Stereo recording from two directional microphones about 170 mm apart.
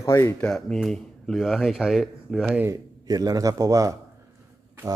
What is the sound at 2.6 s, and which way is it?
A man's voice, 20° right (ahead or behind).